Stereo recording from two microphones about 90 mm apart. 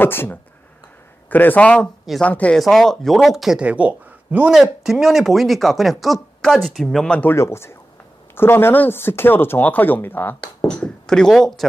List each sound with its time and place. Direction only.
0.0 s speech: 25° left (ahead or behind)
2.6 s speech: 5° left (ahead or behind)
3.6 s speech: 15° right (ahead or behind)
4.6 s speech: centre (ahead or behind)
7.3 s speech: 30° left (ahead or behind)
10.7 s speech: 10° left (ahead or behind)